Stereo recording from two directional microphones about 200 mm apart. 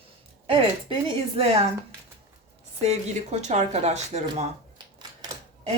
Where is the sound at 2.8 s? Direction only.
35° right (ahead or behind).